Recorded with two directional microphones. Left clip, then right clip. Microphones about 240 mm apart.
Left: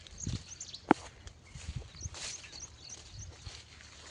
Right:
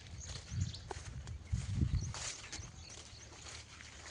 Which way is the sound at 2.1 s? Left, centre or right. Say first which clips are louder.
Left 4 dB; centre.